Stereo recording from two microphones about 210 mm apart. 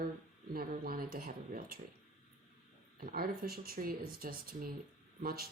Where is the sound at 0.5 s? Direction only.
45° right (ahead or behind).